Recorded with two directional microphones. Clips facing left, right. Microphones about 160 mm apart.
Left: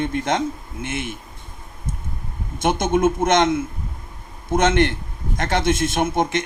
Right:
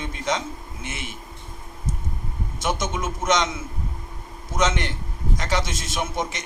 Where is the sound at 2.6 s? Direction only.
55° left (ahead or behind).